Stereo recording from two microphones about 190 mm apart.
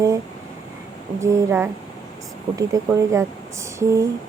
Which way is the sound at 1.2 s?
15° right (ahead or behind).